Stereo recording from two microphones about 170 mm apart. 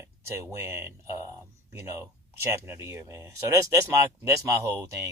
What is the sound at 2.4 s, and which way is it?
Speech, 15° right (ahead or behind).